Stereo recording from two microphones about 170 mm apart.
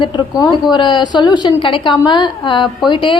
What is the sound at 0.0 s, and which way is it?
A woman's voice, 25° left (ahead or behind).